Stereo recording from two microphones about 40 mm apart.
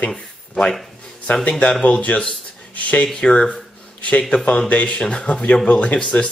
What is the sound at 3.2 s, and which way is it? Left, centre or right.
Speech, left.